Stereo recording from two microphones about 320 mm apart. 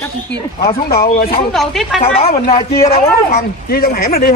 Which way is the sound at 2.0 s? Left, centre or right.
Centre.